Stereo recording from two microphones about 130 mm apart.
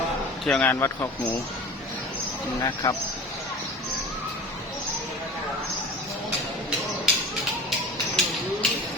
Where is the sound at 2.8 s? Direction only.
30° left (ahead or behind).